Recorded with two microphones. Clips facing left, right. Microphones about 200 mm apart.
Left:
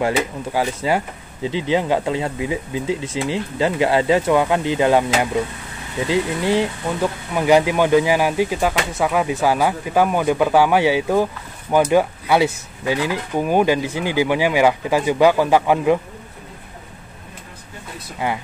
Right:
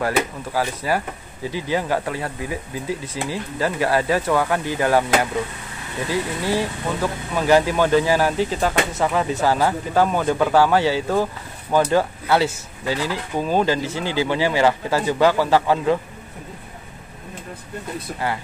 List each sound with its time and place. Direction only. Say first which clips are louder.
0.0 s speech: left 2 dB; 20° left (ahead or behind)
18.2 s speech: left 2 dB; 20° left (ahead or behind)